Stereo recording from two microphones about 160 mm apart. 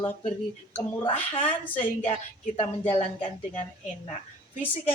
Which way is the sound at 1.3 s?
35° left (ahead or behind).